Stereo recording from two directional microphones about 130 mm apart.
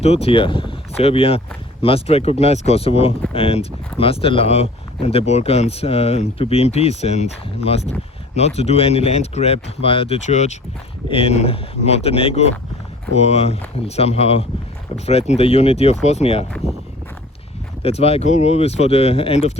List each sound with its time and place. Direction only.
0.0 s speech: 50° left (ahead or behind)
10.2 s speech: 60° left (ahead or behind)
11.1 s speech: 50° left (ahead or behind)
17.8 s speech: 50° left (ahead or behind)